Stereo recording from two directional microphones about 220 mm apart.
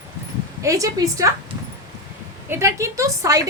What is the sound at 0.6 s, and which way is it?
Speech, 15° right (ahead or behind).